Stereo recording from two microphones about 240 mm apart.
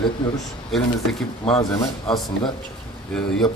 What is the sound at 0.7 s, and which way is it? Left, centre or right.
Speech, centre.